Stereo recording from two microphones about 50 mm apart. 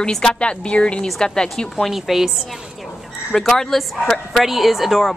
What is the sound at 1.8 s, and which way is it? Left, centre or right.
Speech, centre.